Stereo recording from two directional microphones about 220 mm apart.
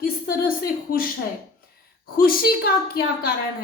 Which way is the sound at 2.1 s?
40° left (ahead or behind).